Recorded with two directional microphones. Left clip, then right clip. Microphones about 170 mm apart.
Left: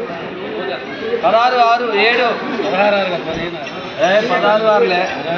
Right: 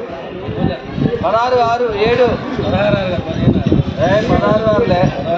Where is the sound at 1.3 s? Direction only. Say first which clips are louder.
Left 1 dB; 25° right (ahead or behind).